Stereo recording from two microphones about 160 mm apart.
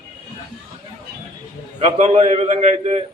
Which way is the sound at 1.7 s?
40° right (ahead or behind).